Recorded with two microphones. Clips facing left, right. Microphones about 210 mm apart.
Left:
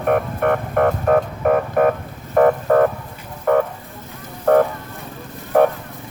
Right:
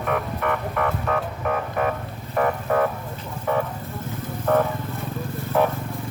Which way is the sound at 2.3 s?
50° left (ahead or behind).